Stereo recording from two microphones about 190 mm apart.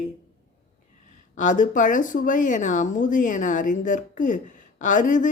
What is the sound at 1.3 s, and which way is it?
Speech, 40° left (ahead or behind).